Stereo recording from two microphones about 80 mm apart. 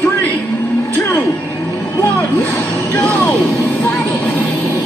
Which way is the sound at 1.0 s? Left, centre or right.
Left.